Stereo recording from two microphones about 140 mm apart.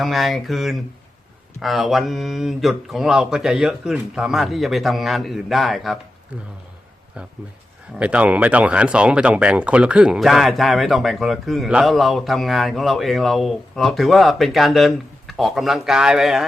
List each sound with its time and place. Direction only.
0.0 s speech: centre (ahead or behind)
6.3 s a man's voice: 10° right (ahead or behind)
7.9 s speech: 10° right (ahead or behind)